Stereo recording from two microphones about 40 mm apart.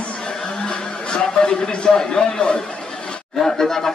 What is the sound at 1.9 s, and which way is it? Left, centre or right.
Speech, centre.